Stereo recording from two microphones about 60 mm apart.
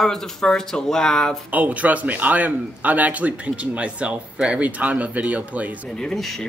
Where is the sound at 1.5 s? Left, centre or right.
Right.